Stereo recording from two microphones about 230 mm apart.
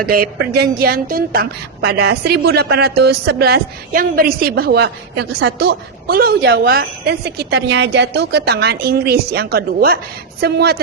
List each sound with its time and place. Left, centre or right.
0.0 s a woman's voice: right